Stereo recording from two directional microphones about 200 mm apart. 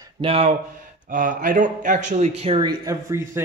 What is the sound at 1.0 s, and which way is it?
Speech, 40° right (ahead or behind).